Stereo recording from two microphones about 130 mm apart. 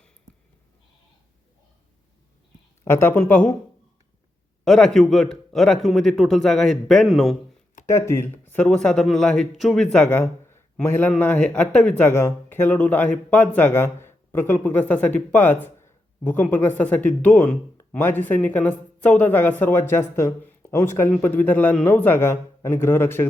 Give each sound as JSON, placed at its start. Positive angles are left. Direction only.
{"t": 2.8, "sound": "speech", "side_deg": 20}
{"t": 4.6, "sound": "a man's voice", "side_deg": 5}
{"t": 7.9, "sound": "speech", "side_deg": 20}
{"t": 8.6, "sound": "a man's voice", "side_deg": 5}
{"t": 10.1, "sound": "a man's voice", "side_deg": 15}